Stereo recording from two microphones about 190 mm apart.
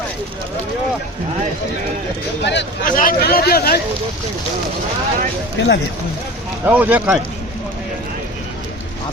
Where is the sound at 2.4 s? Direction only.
65° left (ahead or behind).